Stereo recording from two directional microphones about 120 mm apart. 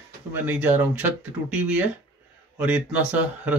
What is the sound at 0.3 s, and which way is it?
Speech, 15° right (ahead or behind).